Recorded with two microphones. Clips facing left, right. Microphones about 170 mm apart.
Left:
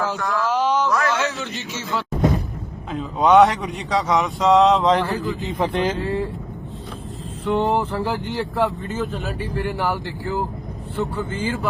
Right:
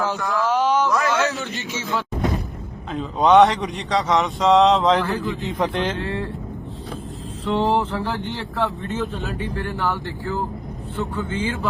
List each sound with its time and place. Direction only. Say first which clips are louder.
0.0 s a sound: right 1 dB; centre (ahead or behind)
0.9 s a man's voice: right 1 dB; 5° right (ahead or behind)
7.4 s speech: even; centre (ahead or behind)
9.6 s speech: left 3 dB; 15° left (ahead or behind)
11.2 s speech: even; centre (ahead or behind)